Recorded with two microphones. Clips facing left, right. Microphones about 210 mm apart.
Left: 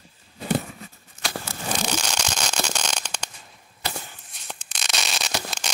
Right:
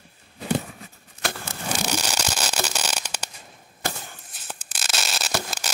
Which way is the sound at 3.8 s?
50° right (ahead or behind).